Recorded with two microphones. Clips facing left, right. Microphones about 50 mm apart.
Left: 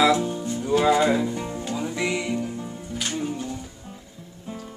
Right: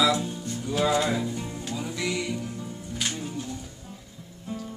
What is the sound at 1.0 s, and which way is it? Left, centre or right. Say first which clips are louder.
Speech: left 5 dB; left.